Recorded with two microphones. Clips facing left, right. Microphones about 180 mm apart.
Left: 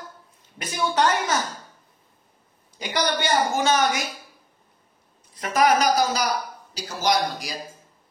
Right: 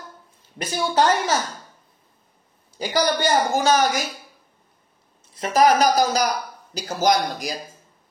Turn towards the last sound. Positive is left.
turn(degrees=-45)  # may be behind; listen again after turning